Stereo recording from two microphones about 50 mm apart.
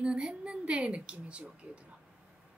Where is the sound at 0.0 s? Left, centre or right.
Centre.